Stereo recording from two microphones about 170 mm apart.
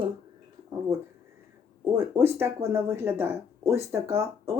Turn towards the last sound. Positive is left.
turn(degrees=-15)  # may be behind; listen again after turning